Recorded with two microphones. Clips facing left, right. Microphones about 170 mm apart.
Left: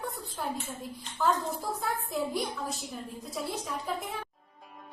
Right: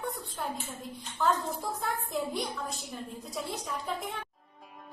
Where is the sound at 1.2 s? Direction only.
Centre (ahead or behind).